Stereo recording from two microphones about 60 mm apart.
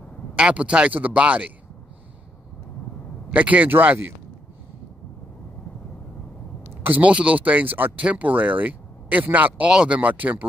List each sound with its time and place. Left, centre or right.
0.4 s speech: centre
3.3 s speech: right
6.7 s a sound: right
7.1 s speech: right
9.7 s speech: centre
9.9 s speech: right